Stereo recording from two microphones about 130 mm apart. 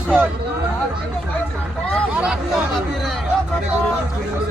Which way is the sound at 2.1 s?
10° right (ahead or behind).